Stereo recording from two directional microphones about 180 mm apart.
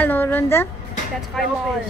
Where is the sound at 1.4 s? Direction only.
Centre (ahead or behind).